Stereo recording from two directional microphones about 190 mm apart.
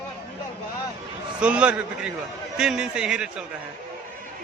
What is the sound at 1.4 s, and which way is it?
A man's voice, 5° right (ahead or behind).